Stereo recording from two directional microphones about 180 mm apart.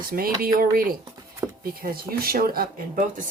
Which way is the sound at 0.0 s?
55° right (ahead or behind).